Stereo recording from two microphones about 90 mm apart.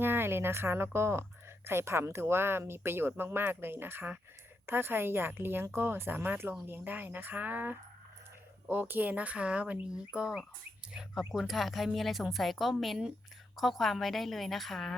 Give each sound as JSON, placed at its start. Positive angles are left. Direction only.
{"t": 0.0, "sound": "a woman's voice", "side_deg": -25}